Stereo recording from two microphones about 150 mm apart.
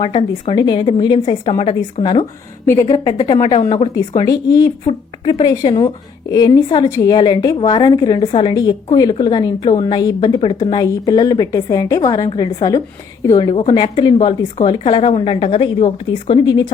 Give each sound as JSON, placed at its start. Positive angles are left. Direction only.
{"t": 0.0, "sound": "speech", "side_deg": 35}
{"t": 2.6, "sound": "a woman's voice", "side_deg": 20}
{"t": 4.3, "sound": "a woman's voice", "side_deg": 25}